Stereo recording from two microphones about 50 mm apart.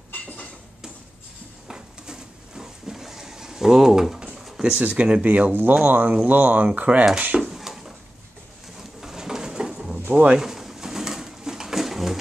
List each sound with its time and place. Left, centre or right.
1.7 s a sound: centre
4.6 s speech: right
5.5 s speech: right
7.4 s a sound: centre
8.7 s pigeon: centre
10.1 s speech: right
10.4 s pigeon: centre